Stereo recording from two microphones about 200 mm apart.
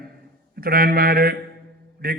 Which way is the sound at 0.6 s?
50° right (ahead or behind).